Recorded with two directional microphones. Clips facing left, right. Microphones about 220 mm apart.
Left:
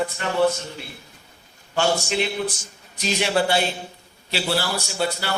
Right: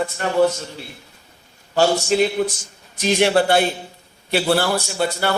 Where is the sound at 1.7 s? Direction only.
40° right (ahead or behind).